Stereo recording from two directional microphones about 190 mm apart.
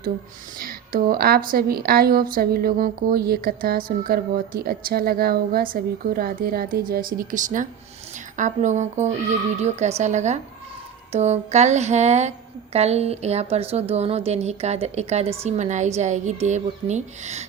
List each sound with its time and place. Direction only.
0.6 s a woman's voice: 50° right (ahead or behind)